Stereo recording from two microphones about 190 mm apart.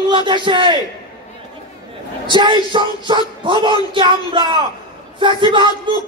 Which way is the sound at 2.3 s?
25° right (ahead or behind).